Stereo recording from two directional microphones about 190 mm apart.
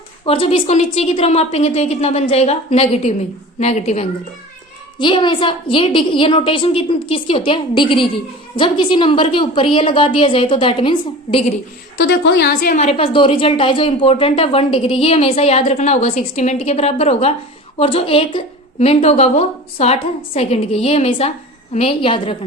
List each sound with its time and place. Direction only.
0.3 s speech: 30° left (ahead or behind)
4.9 s a woman's voice: 25° left (ahead or behind)
11.9 s a woman's voice: 65° left (ahead or behind)
12.7 s speech: 35° left (ahead or behind)